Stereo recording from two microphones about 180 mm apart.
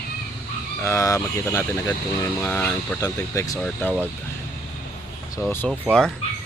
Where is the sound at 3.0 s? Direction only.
20° left (ahead or behind).